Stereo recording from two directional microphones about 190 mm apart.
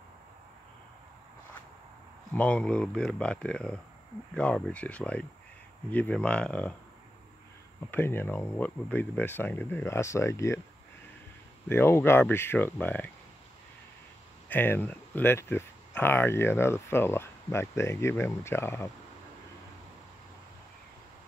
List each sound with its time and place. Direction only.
2.3 s speech: 5° left (ahead or behind)
7.9 s speech: 10° left (ahead or behind)
11.7 s speech: 10° left (ahead or behind)
14.5 s speech: 10° left (ahead or behind)